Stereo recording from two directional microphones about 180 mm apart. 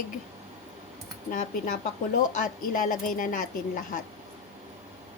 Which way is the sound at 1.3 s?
45° left (ahead or behind).